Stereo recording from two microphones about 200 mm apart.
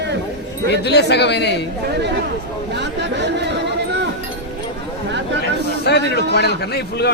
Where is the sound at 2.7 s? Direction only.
60° right (ahead or behind).